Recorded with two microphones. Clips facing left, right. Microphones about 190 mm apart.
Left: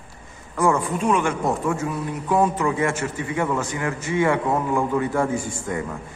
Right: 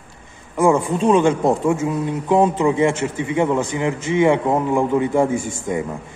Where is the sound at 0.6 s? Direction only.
25° right (ahead or behind).